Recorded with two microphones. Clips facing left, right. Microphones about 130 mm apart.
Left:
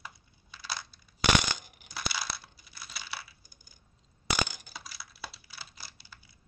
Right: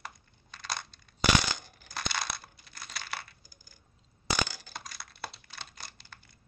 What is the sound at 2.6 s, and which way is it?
Crumpling, 5° left (ahead or behind).